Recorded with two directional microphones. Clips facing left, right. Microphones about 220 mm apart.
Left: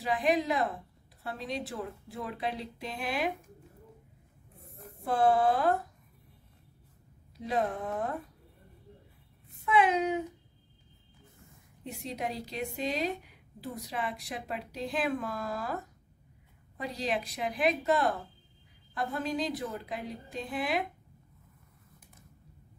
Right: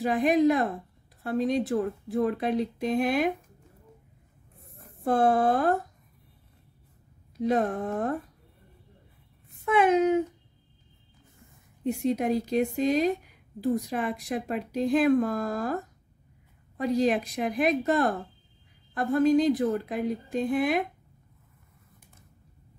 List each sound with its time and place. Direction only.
0.0 s a woman's voice: 50° right (ahead or behind)
5.0 s a woman's voice: 50° right (ahead or behind)
7.4 s a woman's voice: 50° right (ahead or behind)
9.7 s a woman's voice: 45° right (ahead or behind)
11.8 s a woman's voice: 50° right (ahead or behind)